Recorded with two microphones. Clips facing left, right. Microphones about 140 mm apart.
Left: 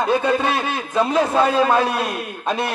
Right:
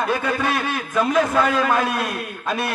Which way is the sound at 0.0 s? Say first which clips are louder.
Left 4 dB; 25° left (ahead or behind).